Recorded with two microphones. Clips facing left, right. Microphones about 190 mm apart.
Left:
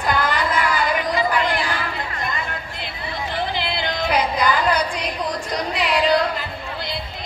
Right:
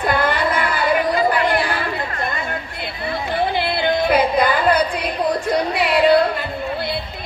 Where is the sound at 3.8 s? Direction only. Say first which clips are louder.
Right 5 dB; 55° right (ahead or behind).